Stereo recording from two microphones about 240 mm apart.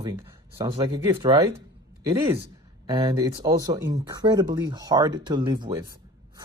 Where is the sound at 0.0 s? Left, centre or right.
Centre.